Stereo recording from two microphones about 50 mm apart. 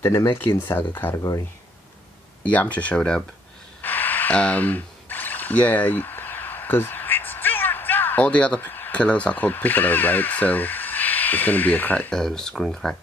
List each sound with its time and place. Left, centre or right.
0.0 s speech: left
0.4 s speech: left
2.4 s speech: left
3.8 s a sound: left
4.3 s speech: left
4.6 s a sound: left
8.2 s speech: left
8.5 s a sound: left
8.9 s speech: left
12.1 s speech: centre